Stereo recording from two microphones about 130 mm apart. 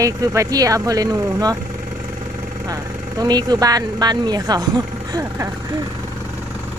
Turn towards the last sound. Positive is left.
turn(degrees=-30)  # may be behind; listen again after turning